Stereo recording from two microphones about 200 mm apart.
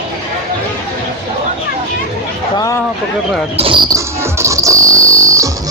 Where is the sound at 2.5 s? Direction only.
15° left (ahead or behind).